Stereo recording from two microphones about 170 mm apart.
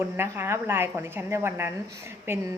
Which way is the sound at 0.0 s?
15° right (ahead or behind).